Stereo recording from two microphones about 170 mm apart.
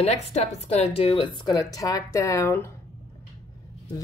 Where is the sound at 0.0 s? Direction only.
40° left (ahead or behind); by 2.7 s 15° left (ahead or behind).